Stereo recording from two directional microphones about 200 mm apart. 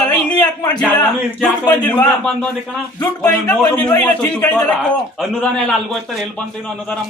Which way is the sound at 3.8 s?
5° left (ahead or behind).